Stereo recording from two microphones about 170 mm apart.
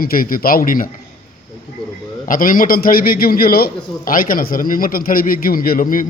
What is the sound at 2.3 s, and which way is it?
A man's voice, 55° left (ahead or behind).